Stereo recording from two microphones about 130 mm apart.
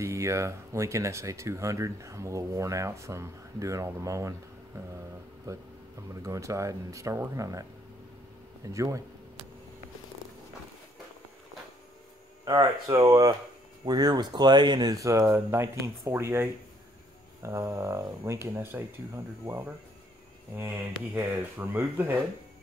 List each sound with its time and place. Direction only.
0.0 s speech: 20° right (ahead or behind)
6.2 s speech: 25° right (ahead or behind)
8.7 s speech: 25° right (ahead or behind)
12.4 s speech: 35° right (ahead or behind); by 22.2 s 15° right (ahead or behind)